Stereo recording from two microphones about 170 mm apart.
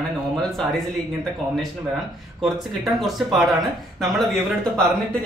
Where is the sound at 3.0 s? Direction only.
Centre (ahead or behind).